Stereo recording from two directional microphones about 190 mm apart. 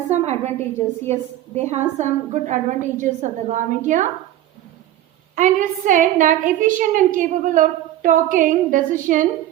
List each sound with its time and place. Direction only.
0.1 s a woman's voice: 35° right (ahead or behind)
5.3 s a woman's voice: 40° right (ahead or behind)